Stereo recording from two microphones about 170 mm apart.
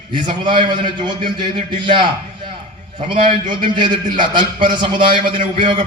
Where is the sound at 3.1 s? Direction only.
30° right (ahead or behind).